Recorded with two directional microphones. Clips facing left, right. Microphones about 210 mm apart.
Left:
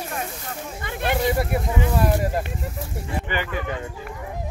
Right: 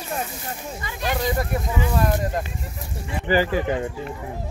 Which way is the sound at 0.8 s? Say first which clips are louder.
Left 3 dB; 55° left (ahead or behind).